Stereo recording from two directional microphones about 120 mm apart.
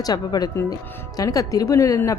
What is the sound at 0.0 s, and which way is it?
A woman's voice, 35° left (ahead or behind).